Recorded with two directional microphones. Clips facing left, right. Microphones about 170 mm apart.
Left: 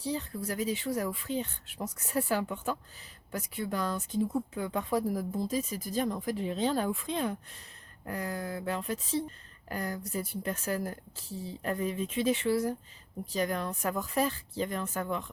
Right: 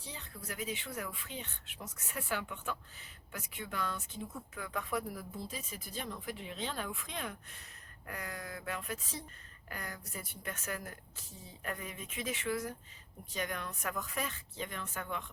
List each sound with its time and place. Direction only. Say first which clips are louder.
0.0 s speech: left 14 dB; 35° left (ahead or behind)